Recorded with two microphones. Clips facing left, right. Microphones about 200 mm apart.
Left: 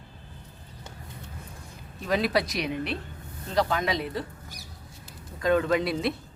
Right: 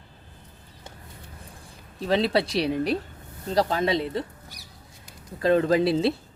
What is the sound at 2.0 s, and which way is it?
Speech, 30° right (ahead or behind).